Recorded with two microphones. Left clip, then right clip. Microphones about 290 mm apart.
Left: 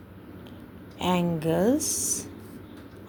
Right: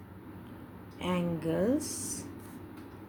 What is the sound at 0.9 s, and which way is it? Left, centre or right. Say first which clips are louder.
Speech: left 7 dB; left.